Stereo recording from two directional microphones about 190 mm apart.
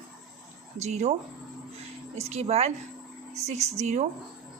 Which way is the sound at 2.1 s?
35° right (ahead or behind).